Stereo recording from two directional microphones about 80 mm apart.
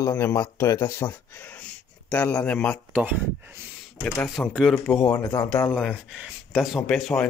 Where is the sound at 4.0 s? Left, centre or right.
Left.